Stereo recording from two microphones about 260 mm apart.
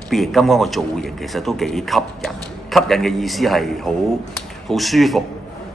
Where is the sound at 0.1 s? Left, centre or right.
Centre.